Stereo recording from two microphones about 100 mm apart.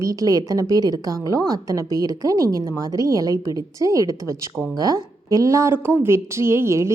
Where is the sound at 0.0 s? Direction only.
35° right (ahead or behind).